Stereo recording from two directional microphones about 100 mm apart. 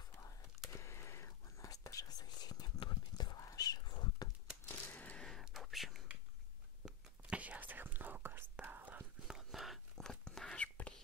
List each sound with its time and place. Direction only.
0.7 s whispering: 30° left (ahead or behind); by 4.3 s 45° left (ahead or behind)
4.6 s a sound: 15° left (ahead or behind)
5.4 s whispering: centre (ahead or behind)
7.2 s whispering: 15° right (ahead or behind)
9.3 s whispering: centre (ahead or behind)